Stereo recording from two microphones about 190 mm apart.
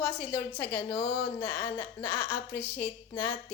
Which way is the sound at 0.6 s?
20° left (ahead or behind).